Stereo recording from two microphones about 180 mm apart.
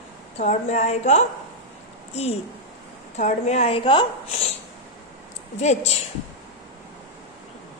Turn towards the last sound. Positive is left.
turn(degrees=40)  # may be behind; listen again after turning